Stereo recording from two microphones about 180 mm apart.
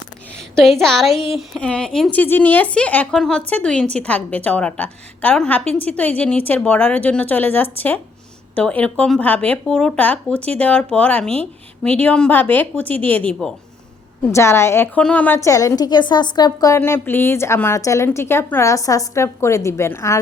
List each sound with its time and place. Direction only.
0.5 s a woman's voice: centre (ahead or behind)